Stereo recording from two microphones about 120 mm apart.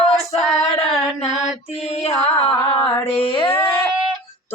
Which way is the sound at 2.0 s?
55° left (ahead or behind).